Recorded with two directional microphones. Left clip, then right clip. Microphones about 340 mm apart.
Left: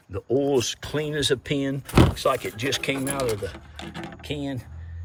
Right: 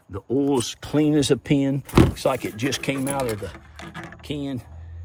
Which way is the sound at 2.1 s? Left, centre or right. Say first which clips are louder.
Even; centre.